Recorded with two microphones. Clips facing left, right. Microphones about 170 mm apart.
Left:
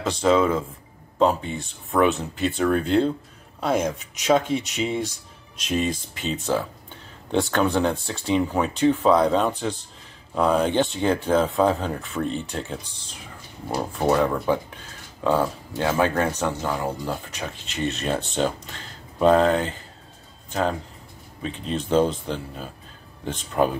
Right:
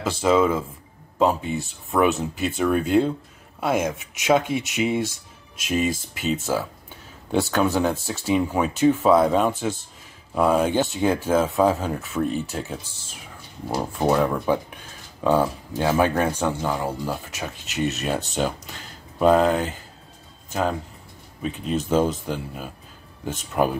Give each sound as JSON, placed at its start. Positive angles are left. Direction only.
{"t": 0.0, "sound": "speech", "side_deg": -5}
{"t": 21.4, "sound": "speech", "side_deg": -5}